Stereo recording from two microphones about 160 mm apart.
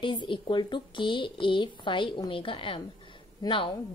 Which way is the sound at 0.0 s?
30° left (ahead or behind).